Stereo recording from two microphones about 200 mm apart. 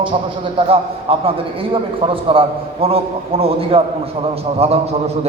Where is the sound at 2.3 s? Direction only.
25° right (ahead or behind).